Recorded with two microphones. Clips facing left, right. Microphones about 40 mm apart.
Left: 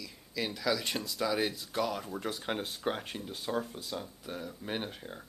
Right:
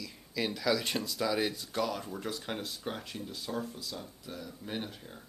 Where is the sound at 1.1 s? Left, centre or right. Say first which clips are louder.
Left 1 dB; centre; by 2.6 s left.